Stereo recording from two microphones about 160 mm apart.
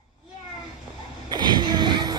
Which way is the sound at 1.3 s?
25° right (ahead or behind).